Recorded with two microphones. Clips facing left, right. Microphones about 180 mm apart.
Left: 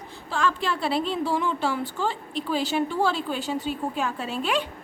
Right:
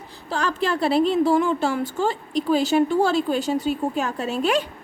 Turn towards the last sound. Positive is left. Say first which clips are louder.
# right 5 dB
turn(degrees=-40)  # may be behind; listen again after turning